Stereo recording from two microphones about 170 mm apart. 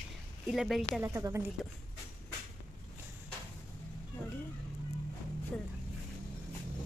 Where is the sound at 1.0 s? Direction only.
15° right (ahead or behind).